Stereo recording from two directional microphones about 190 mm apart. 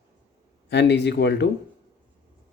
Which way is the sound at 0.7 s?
65° left (ahead or behind).